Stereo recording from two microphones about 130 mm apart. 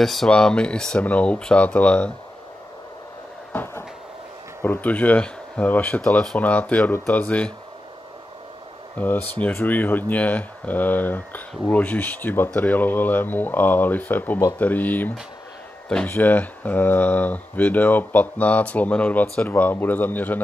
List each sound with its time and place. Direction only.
0.0 s speech: centre (ahead or behind)
3.5 s cupboard open or close: 15° left (ahead or behind)
4.6 s speech: 15° left (ahead or behind)
8.9 s speech: 15° left (ahead or behind)